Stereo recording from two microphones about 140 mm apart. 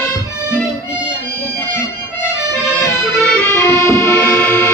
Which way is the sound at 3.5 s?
20° left (ahead or behind).